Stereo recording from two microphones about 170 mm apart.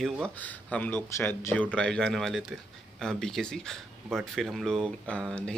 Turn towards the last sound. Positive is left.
turn(degrees=5)  # may be behind; listen again after turning